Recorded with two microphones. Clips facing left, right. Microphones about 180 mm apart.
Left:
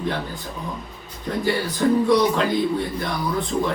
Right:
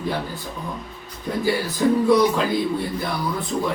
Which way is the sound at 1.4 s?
5° right (ahead or behind).